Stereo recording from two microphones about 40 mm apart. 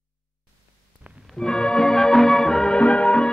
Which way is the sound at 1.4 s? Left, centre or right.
Centre.